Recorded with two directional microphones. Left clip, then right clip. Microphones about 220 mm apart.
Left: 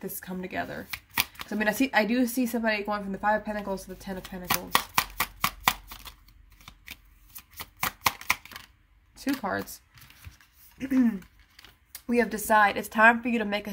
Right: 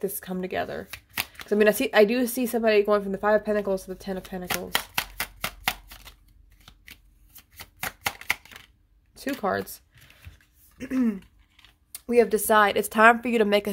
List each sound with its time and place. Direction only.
0.2 s speech: 50° right (ahead or behind)
4.5 s chopping: 5° right (ahead or behind)
7.8 s a sound: 5° right (ahead or behind)
9.1 s speech: 50° right (ahead or behind)